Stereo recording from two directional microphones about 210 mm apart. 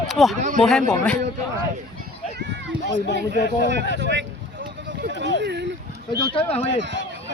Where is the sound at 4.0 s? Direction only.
60° right (ahead or behind).